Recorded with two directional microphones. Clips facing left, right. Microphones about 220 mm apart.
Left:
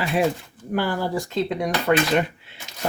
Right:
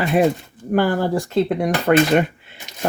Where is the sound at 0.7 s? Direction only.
50° right (ahead or behind).